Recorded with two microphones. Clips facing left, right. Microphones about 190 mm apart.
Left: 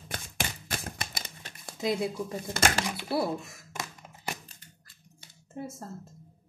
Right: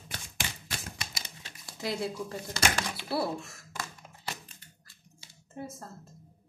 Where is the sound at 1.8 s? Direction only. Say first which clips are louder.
Left 4 dB; 20° left (ahead or behind).